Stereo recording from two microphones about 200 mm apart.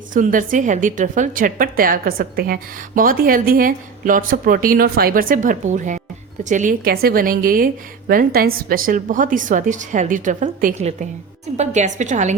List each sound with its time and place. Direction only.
0.1 s a woman's voice: 40° right (ahead or behind)